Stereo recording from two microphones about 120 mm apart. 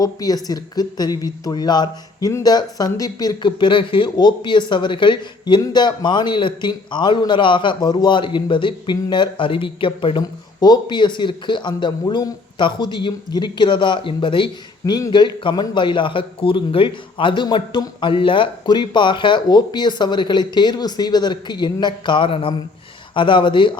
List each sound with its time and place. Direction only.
0.0 s speech: 30° left (ahead or behind)